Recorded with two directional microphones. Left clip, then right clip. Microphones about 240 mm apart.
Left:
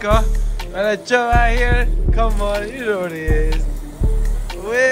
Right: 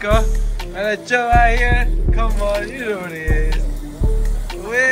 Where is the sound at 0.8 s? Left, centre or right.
Centre.